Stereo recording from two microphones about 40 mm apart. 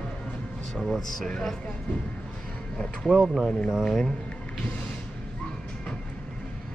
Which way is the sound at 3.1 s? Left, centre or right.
Centre.